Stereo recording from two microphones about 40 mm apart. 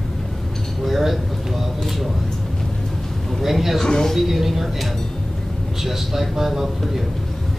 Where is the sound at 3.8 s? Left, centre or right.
Centre.